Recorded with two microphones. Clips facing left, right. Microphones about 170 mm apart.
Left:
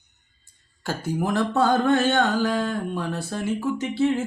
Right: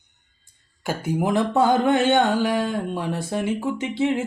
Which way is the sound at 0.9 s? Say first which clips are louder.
Right 2 dB; 10° right (ahead or behind).